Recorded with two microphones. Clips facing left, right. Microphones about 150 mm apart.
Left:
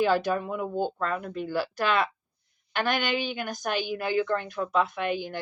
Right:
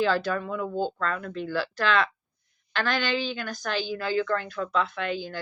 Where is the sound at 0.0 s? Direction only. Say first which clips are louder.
Left 1 dB; 15° left (ahead or behind).